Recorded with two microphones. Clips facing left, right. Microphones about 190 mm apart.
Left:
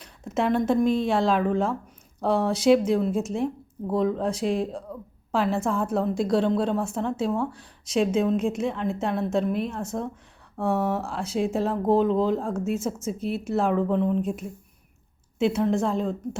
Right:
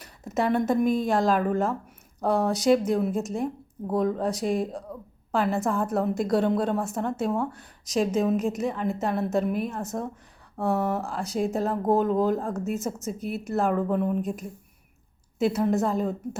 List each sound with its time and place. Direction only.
0.0 s a sound: centre (ahead or behind)
1.0 s speech: centre (ahead or behind)
13.1 s speech: 30° left (ahead or behind)
13.5 s speech: centre (ahead or behind)